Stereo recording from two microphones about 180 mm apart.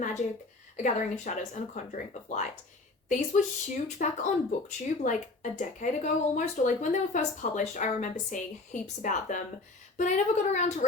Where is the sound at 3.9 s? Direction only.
40° left (ahead or behind).